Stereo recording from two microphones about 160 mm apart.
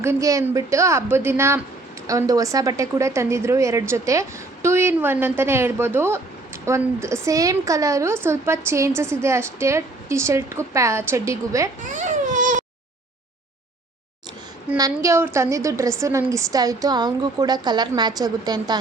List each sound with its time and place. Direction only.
0.0 s a woman's voice: 20° right (ahead or behind)
11.9 s baby cry: 50° right (ahead or behind)
14.8 s a woman's voice: 20° right (ahead or behind)